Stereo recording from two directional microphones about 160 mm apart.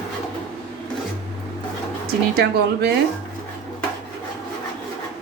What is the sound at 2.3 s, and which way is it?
Speech, 85° right.